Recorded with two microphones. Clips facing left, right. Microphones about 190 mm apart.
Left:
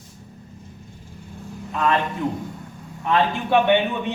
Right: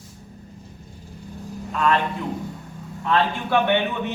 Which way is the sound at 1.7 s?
20° left (ahead or behind).